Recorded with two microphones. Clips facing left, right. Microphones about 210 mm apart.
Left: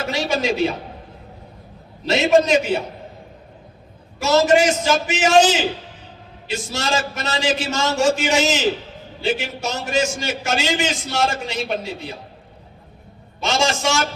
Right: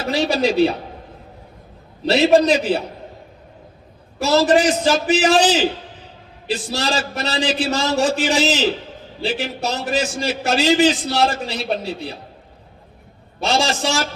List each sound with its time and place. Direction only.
0.1 s a man's voice: 35° right (ahead or behind)
2.0 s a man's voice: 35° right (ahead or behind)
4.2 s a man's voice: 35° right (ahead or behind)
13.4 s a man's voice: 35° right (ahead or behind)